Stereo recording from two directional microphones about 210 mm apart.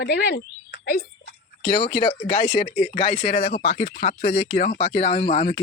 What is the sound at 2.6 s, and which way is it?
Speech, 40° left (ahead or behind).